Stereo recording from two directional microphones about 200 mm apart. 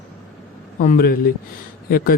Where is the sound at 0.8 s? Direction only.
45° left (ahead or behind).